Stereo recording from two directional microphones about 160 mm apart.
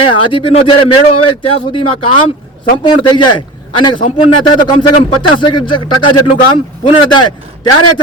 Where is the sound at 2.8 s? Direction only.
30° left (ahead or behind).